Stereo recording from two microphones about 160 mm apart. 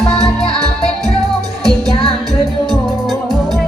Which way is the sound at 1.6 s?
25° right (ahead or behind).